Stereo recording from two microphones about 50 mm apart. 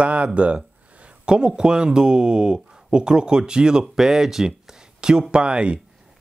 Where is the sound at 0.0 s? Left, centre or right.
Right.